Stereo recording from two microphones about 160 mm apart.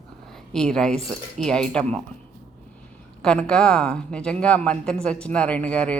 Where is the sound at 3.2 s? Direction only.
5° left (ahead or behind).